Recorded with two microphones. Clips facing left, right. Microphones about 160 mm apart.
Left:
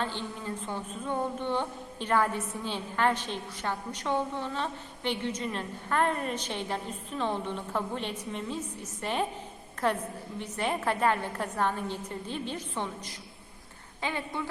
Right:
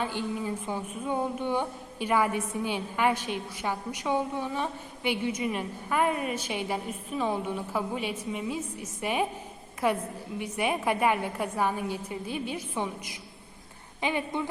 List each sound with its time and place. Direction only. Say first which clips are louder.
0.0 s a woman's voice: right 4 dB; 10° right (ahead or behind)